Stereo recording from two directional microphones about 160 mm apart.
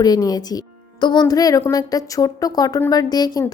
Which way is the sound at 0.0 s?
25° left (ahead or behind).